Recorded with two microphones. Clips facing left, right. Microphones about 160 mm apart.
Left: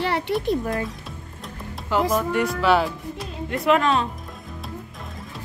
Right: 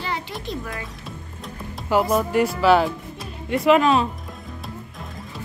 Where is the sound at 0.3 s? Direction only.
60° left (ahead or behind).